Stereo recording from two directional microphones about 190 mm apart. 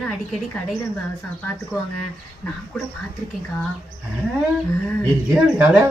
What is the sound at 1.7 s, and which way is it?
Speech, 15° left (ahead or behind).